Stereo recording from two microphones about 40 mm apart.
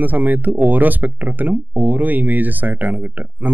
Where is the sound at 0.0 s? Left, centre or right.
Right.